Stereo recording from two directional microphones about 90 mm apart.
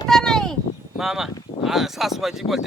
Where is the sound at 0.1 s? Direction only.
5° left (ahead or behind).